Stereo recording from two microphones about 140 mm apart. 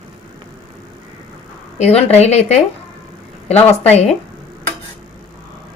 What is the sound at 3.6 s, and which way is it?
Speech, 50° left (ahead or behind).